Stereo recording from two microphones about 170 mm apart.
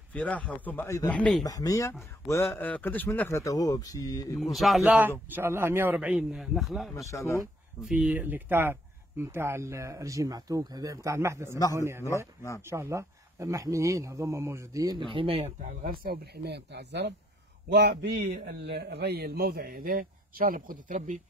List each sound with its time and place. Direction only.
0.1 s speech: 10° left (ahead or behind)
1.4 s speech: 20° left (ahead or behind)
4.4 s a man's voice: centre (ahead or behind)
7.1 s speech: 15° left (ahead or behind)
7.8 s a man's voice: 5° right (ahead or behind); by 15.5 s 30° right (ahead or behind)
15.6 s a man's voice: 55° right (ahead or behind)